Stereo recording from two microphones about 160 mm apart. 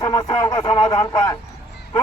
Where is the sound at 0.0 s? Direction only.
25° left (ahead or behind).